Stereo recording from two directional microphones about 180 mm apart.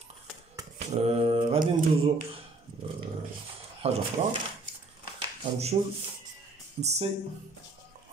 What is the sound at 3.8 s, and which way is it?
Speech, 35° right (ahead or behind).